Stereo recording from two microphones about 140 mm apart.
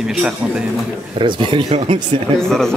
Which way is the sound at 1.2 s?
35° right (ahead or behind).